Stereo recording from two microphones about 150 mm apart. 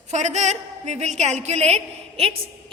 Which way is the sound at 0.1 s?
50° right (ahead or behind).